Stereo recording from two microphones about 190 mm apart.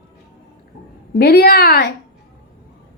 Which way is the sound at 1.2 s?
55° left (ahead or behind).